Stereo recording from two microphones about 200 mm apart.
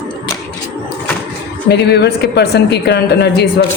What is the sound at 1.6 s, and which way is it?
A woman's voice, 55° left (ahead or behind).